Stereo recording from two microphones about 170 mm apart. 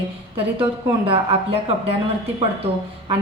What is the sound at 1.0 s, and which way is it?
Speech, 35° right (ahead or behind).